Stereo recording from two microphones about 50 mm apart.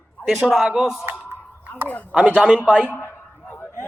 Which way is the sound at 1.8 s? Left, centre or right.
Left.